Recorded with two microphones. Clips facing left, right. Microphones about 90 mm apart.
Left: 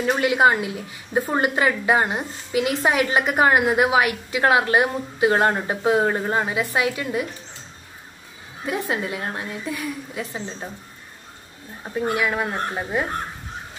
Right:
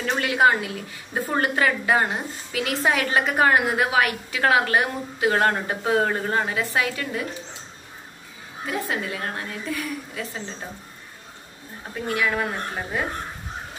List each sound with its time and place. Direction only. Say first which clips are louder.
0.0 s a woman's voice: left 2 dB; 15° left (ahead or behind)
8.6 s a woman's voice: left 2 dB; 20° left (ahead or behind)
11.8 s a woman's voice: left 3 dB; 20° left (ahead or behind)